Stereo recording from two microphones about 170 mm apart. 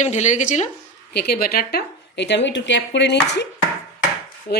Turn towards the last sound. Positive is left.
turn(degrees=65)  # may be behind; listen again after turning